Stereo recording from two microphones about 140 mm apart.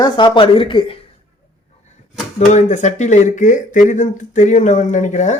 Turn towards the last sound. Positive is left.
turn(degrees=60)  # may be behind; listen again after turning